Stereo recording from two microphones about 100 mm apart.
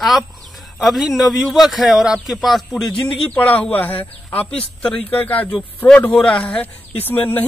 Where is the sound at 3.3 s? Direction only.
15° left (ahead or behind).